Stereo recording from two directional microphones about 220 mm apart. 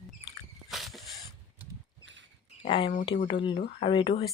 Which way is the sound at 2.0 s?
55° right (ahead or behind).